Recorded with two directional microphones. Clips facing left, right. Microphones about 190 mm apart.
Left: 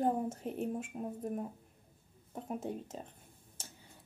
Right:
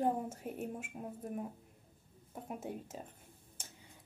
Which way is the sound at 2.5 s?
10° right (ahead or behind).